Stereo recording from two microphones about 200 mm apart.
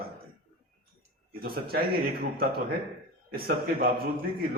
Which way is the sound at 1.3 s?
50° right (ahead or behind).